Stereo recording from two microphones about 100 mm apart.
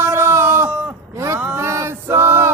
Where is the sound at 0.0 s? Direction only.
25° right (ahead or behind).